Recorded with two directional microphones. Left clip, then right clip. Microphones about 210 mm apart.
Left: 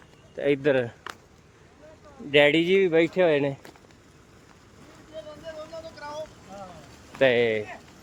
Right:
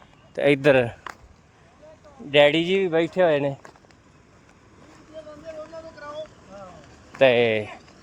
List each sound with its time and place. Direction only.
0.3 s speech: 50° right (ahead or behind)
2.3 s speech: 20° right (ahead or behind)
5.4 s boat: 40° left (ahead or behind)
7.2 s speech: 30° right (ahead or behind)